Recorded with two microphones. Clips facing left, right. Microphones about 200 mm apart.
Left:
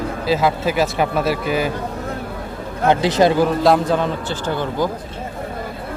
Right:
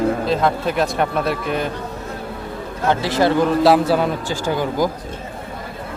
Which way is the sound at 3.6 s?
5° right (ahead or behind).